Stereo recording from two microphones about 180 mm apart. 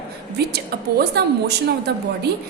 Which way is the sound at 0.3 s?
65° right (ahead or behind).